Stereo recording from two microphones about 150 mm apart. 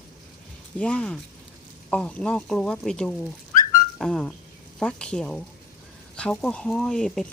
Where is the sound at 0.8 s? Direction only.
10° left (ahead or behind).